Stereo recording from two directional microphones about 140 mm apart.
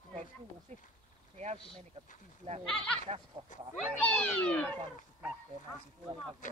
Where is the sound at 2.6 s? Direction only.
5° left (ahead or behind).